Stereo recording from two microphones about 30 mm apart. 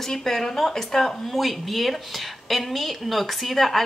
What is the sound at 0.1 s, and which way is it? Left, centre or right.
Speech, centre.